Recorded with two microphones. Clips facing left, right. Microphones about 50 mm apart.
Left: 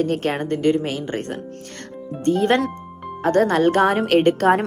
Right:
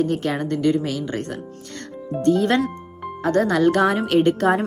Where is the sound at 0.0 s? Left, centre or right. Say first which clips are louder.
Even; left.